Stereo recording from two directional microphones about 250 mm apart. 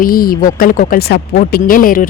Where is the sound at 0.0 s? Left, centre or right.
Left.